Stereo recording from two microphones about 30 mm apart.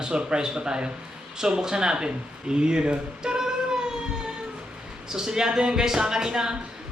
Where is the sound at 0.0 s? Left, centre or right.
Right.